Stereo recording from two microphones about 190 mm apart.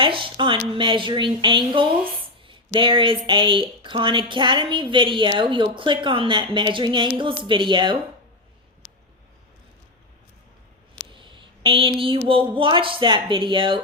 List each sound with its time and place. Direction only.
0.0 s speech: 25° right (ahead or behind)
11.1 s speech: 25° right (ahead or behind)